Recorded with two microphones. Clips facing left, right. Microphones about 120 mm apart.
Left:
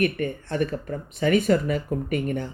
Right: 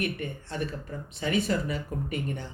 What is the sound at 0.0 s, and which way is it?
Speech, 60° left (ahead or behind).